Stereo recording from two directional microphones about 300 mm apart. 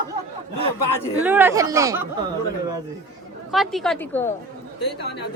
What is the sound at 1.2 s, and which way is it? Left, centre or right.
Speech, centre.